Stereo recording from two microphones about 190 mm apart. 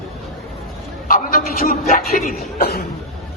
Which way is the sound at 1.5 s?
50° left (ahead or behind).